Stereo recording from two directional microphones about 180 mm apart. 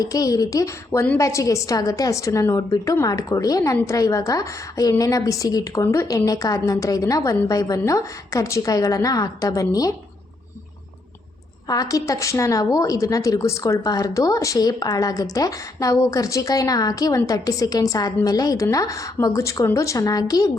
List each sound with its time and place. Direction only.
0.0 s a woman's voice: 20° left (ahead or behind)
11.7 s a woman's voice: 20° left (ahead or behind)